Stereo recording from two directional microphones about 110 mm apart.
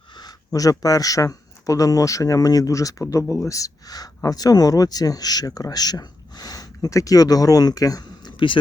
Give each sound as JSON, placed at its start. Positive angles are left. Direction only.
{"t": 0.1, "sound": "speech", "side_deg": 40}